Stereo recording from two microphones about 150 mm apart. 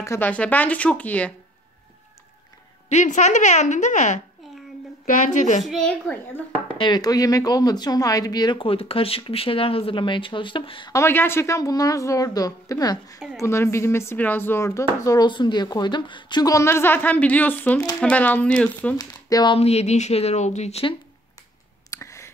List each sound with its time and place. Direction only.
0.0 s speech: 15° left (ahead or behind)
2.9 s a woman's voice: 50° left (ahead or behind)
5.7 s speech: 5° left (ahead or behind)
6.8 s speech: 25° left (ahead or behind)
10.9 s a woman's voice: 15° left (ahead or behind)
18.9 s speech: 25° left (ahead or behind)
19.5 s speech: 45° left (ahead or behind)
21.9 s a sound: 20° left (ahead or behind)